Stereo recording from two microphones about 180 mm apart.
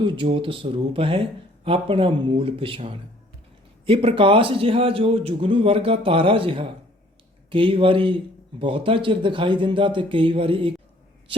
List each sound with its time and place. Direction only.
0.0 s speech: 30° right (ahead or behind)